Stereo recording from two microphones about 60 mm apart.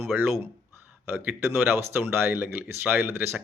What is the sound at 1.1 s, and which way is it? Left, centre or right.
Speech, right.